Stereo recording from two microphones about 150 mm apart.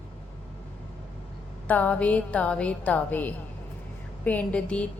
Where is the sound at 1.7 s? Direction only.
10° left (ahead or behind).